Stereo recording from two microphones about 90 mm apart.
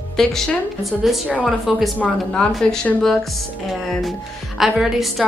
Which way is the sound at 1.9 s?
15° left (ahead or behind).